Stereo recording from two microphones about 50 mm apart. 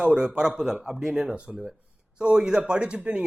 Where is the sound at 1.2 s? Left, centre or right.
Right.